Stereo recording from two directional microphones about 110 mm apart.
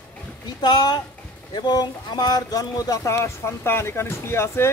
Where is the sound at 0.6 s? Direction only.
40° left (ahead or behind).